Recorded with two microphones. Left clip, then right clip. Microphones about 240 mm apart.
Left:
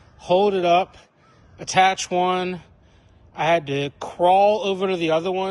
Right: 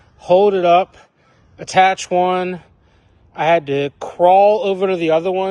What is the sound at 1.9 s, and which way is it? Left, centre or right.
Speech, right.